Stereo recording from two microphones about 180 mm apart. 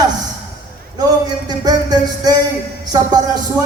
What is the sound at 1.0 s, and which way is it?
Music, 20° right (ahead or behind).